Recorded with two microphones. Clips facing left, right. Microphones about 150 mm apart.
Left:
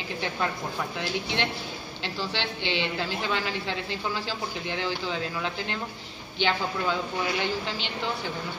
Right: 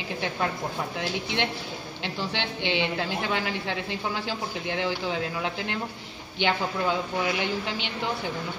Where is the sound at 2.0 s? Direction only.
20° right (ahead or behind).